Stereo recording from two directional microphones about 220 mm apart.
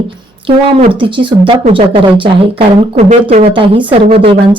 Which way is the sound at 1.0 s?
20° right (ahead or behind).